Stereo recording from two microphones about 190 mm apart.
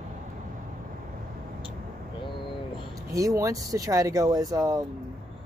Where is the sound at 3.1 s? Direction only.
20° right (ahead or behind).